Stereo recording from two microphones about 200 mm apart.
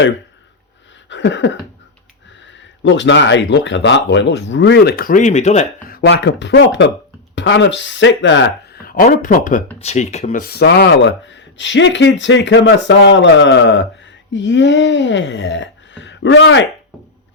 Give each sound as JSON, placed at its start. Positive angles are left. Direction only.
{"t": 1.1, "sound": "speech", "side_deg": 65}
{"t": 5.9, "sound": "speech", "side_deg": 50}
{"t": 10.4, "sound": "speech", "side_deg": 55}